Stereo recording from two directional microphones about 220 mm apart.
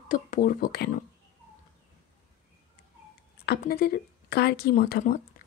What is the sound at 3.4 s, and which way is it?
Speech, 40° left (ahead or behind).